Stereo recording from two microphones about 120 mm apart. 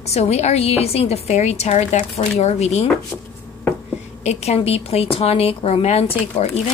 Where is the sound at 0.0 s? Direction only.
60° left (ahead or behind).